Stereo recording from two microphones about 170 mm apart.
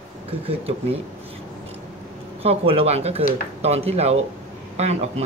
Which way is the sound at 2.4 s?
35° right (ahead or behind).